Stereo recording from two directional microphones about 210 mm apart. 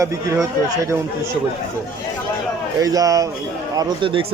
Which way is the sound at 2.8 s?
15° right (ahead or behind).